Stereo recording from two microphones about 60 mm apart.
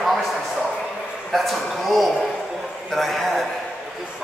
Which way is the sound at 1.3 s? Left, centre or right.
Centre.